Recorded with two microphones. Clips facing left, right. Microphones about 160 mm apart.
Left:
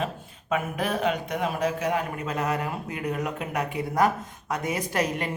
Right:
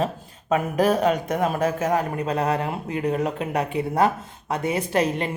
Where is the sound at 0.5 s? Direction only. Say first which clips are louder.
Right 7 dB; 40° right (ahead or behind).